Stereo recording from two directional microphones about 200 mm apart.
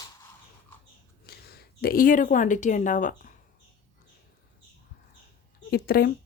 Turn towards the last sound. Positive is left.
turn(degrees=50)  # may be behind; listen again after turning